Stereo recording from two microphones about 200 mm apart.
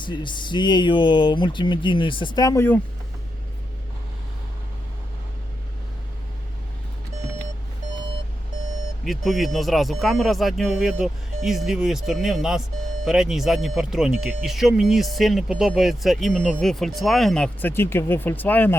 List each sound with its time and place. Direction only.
0.0 s speech: 25° left (ahead or behind)
9.0 s speech: centre (ahead or behind)